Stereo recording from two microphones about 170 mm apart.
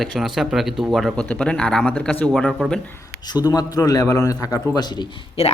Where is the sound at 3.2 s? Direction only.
25° left (ahead or behind).